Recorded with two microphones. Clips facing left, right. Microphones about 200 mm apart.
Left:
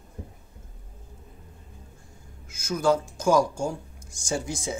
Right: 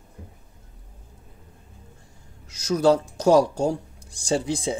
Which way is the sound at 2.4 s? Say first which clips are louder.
Right 5 dB; 35° right (ahead or behind).